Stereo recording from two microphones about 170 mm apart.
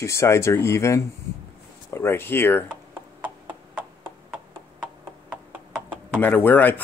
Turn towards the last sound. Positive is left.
turn(degrees=10)  # may be behind; listen again after turning